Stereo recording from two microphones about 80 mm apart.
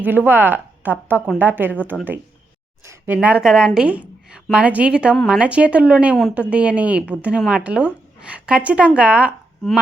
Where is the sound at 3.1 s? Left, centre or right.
Centre.